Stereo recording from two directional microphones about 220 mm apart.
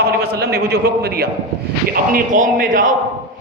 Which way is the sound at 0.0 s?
45° right (ahead or behind).